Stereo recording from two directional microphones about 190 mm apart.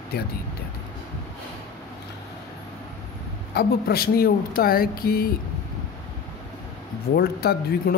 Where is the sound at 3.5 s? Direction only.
55° left (ahead or behind).